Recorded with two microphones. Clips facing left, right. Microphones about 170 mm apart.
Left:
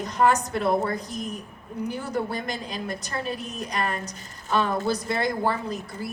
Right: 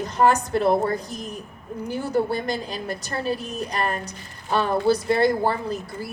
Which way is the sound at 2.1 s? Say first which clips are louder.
Right 8 dB; 35° right (ahead or behind).